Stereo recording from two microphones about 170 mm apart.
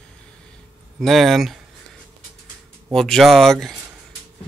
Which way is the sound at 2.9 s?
Centre (ahead or behind).